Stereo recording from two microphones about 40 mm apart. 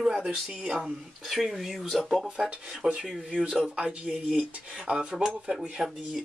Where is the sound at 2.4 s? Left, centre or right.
Centre.